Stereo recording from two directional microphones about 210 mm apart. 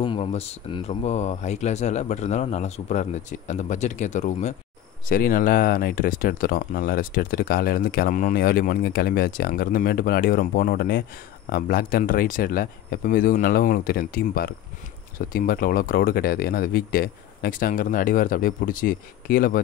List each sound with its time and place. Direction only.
0.0 s speech: 25° left (ahead or behind); by 19.6 s 40° left (ahead or behind)